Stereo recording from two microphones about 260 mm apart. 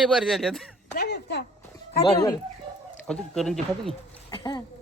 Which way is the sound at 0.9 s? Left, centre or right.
Left.